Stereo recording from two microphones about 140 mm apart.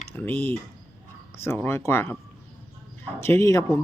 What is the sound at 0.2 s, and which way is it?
Speech, 15° left (ahead or behind).